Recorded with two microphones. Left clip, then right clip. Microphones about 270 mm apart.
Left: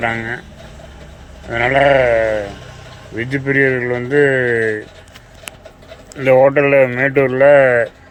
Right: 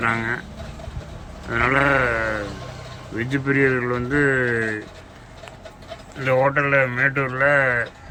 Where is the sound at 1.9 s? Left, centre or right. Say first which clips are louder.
Left 8 dB; right.